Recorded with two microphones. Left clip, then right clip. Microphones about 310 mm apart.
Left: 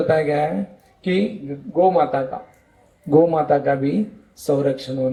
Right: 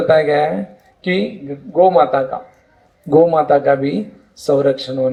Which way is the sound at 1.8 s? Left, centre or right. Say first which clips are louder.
Right 5 dB; right.